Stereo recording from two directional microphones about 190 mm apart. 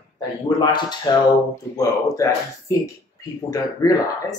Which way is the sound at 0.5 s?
20° left (ahead or behind).